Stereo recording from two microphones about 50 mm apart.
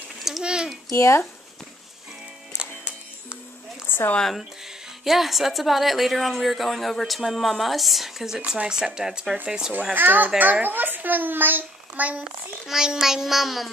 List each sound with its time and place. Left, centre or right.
0.4 s a sound: centre
0.9 s speech: left
2.5 s music: centre
4.4 s a child's voice: centre
9.9 s a child's voice: right
12.3 s a child's voice: centre